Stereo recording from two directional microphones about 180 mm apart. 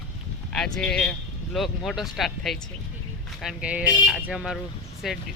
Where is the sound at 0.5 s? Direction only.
5° left (ahead or behind).